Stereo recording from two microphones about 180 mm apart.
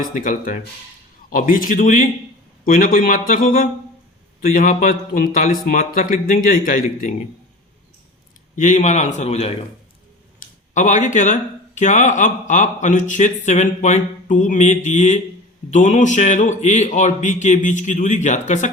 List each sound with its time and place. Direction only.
0.0 s a man's voice: 50° left (ahead or behind)
8.5 s a man's voice: 45° left (ahead or behind)
10.8 s a man's voice: 45° left (ahead or behind)